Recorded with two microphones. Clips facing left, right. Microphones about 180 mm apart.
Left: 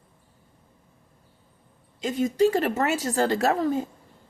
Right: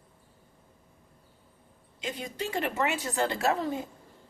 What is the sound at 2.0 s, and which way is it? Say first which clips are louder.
A woman's voice: left 13 dB; 45° left (ahead or behind).